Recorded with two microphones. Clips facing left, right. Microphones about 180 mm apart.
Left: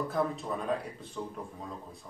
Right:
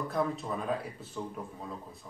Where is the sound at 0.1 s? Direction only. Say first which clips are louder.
Even; centre (ahead or behind).